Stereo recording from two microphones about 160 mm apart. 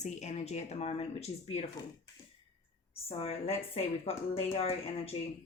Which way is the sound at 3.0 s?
40° left (ahead or behind).